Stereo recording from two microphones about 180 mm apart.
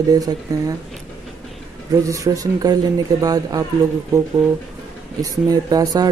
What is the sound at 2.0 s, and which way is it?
Speech, 20° right (ahead or behind).